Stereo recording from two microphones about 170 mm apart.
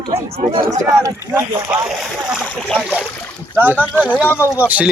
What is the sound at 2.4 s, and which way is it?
Speech, 10° left (ahead or behind).